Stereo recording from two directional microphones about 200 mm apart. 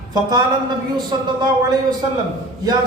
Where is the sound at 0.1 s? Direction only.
20° right (ahead or behind).